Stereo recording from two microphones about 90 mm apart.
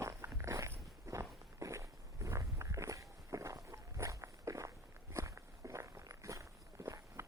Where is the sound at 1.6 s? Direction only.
35° right (ahead or behind).